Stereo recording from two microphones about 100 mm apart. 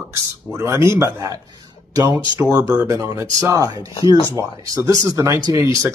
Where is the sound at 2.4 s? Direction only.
25° right (ahead or behind).